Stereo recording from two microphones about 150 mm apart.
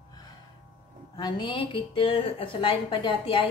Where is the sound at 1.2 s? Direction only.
30° left (ahead or behind).